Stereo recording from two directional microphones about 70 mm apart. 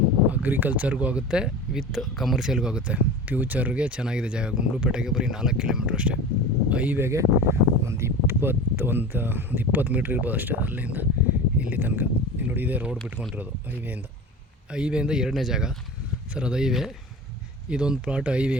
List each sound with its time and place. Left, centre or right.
0.3 s speech: right
7.0 s speech: right
14.7 s speech: centre